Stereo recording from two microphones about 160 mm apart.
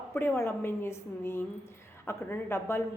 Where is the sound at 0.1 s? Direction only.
15° left (ahead or behind).